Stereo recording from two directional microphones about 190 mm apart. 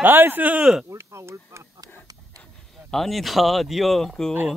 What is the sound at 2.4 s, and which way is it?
Speech, 5° left (ahead or behind).